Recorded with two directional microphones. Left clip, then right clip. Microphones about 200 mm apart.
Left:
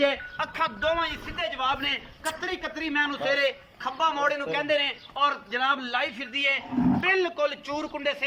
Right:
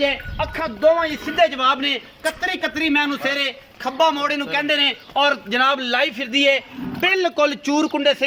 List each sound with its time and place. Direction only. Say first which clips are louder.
0.0 s a man's voice: right 4 dB; 20° right (ahead or behind); by 8.2 s 55° right (ahead or behind)